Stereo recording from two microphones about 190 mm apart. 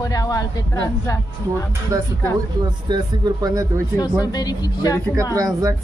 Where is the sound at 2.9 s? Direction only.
20° right (ahead or behind).